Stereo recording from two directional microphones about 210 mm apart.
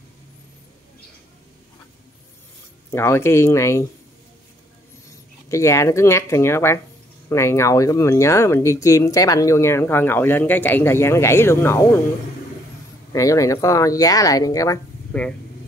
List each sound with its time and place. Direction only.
2.9 s speech: 10° left (ahead or behind)
5.5 s speech: 15° left (ahead or behind)
13.1 s speech: 15° left (ahead or behind)